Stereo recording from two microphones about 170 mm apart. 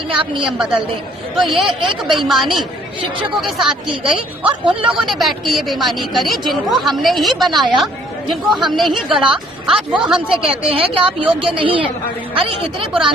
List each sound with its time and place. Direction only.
0.1 s a woman's voice: 30° right (ahead or behind)
1.4 s speech: centre (ahead or behind)
1.9 s a woman's voice: 30° right (ahead or behind)
2.2 s speech: centre (ahead or behind)
4.0 s a woman's voice: 30° right (ahead or behind)
4.9 s speech: centre (ahead or behind)
8.7 s speech: centre (ahead or behind)
10.4 s a woman's voice: 35° right (ahead or behind)